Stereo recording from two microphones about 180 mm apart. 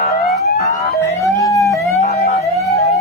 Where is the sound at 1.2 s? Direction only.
15° left (ahead or behind).